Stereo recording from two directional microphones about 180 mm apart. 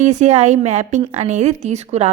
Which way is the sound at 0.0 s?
40° right (ahead or behind).